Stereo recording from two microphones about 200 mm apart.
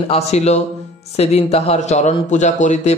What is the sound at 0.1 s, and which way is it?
A man's voice, 35° left (ahead or behind).